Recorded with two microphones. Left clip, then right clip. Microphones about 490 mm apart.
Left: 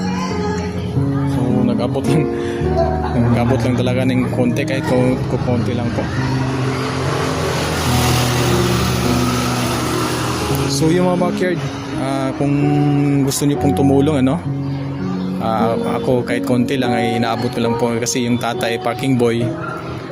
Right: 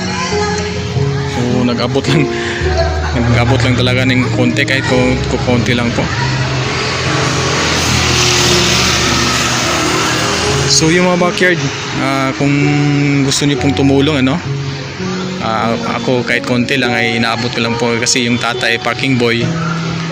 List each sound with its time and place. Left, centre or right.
3.3 s speech: left
10.8 s speech: left
15.4 s speech: left